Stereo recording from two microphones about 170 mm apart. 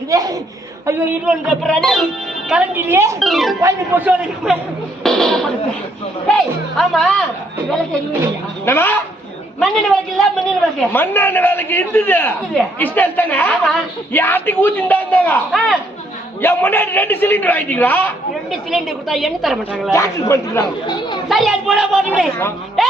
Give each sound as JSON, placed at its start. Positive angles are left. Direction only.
{"t": 0.1, "sound": "a woman's voice", "side_deg": -20}
{"t": 2.5, "sound": "a man's voice", "side_deg": -10}
{"t": 3.2, "sound": "speech", "side_deg": 0}
{"t": 3.6, "sound": "a man's voice", "side_deg": -15}
{"t": 5.0, "sound": "a sound", "side_deg": 0}
{"t": 6.2, "sound": "speech", "side_deg": 0}
{"t": 8.6, "sound": "a man's voice", "side_deg": 15}
{"t": 9.6, "sound": "a man's voice", "side_deg": 0}
{"t": 18.7, "sound": "speech", "side_deg": 0}
{"t": 19.9, "sound": "a man's voice", "side_deg": 15}
{"t": 21.2, "sound": "speech", "side_deg": 0}